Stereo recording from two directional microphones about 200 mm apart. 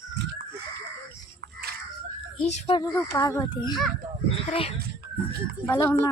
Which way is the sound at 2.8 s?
15° left (ahead or behind).